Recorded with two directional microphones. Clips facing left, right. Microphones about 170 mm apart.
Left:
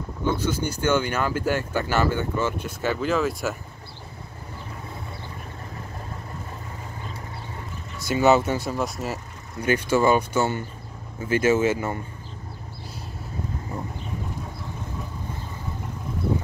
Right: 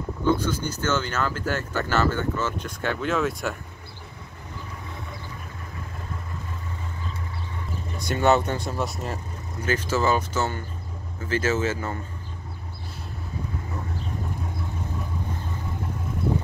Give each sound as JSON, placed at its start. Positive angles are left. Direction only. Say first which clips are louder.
{"t": 0.2, "sound": "speech", "louder": "right 1 dB", "side_deg": 10}
{"t": 8.0, "sound": "speech", "louder": "left 2 dB", "side_deg": 5}